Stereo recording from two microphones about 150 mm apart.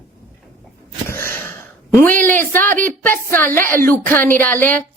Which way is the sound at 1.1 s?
15° left (ahead or behind).